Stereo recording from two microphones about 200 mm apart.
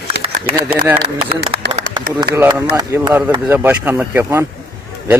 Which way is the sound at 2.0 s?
20° right (ahead or behind).